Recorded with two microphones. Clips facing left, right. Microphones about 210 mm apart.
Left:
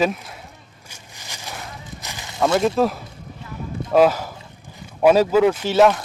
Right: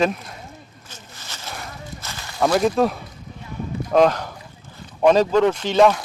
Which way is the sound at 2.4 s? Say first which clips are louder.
Even; centre (ahead or behind).